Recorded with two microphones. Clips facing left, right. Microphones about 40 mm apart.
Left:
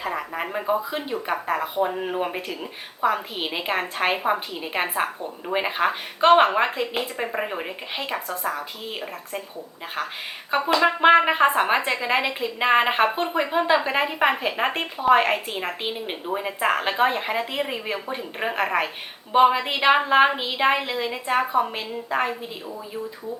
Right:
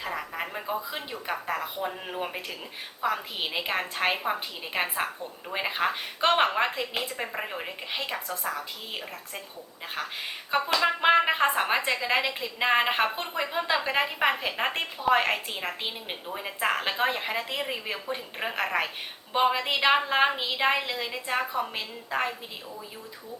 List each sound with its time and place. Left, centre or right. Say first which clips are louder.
0.0 s a sound: left 5 dB; centre
1.3 s speech: left 4 dB; centre
10.8 s speech: left 6 dB; centre